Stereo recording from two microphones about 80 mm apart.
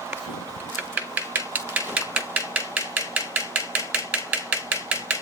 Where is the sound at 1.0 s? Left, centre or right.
Right.